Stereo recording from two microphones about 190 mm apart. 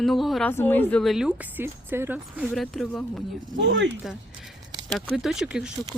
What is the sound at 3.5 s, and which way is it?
Speech, 65° right (ahead or behind).